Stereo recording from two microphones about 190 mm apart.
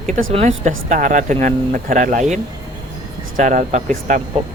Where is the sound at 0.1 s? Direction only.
45° right (ahead or behind).